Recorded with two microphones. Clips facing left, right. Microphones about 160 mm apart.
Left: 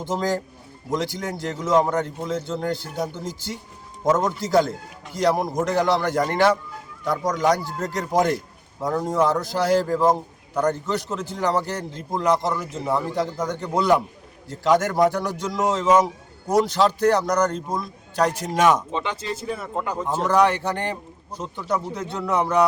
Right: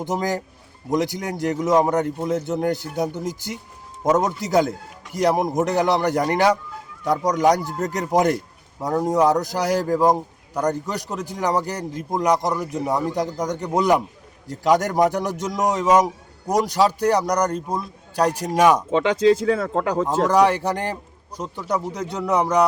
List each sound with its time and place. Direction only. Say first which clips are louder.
0.0 s a man's voice: even; 15° right (ahead or behind)
14.9 s a man's voice: right 1 dB; 20° right (ahead or behind)
18.9 s speech: right 11 dB; 90° right
20.2 s a man's voice: right 1 dB; 15° right (ahead or behind)